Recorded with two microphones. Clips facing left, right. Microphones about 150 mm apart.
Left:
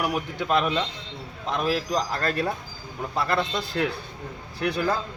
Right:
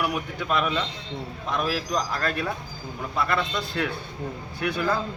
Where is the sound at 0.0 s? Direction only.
35° left (ahead or behind).